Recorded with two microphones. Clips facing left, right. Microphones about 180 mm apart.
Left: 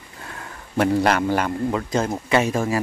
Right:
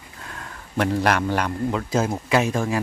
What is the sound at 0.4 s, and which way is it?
A man's voice, 5° left (ahead or behind).